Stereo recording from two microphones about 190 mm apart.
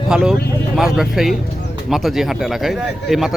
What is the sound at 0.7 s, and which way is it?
Speech, centre (ahead or behind).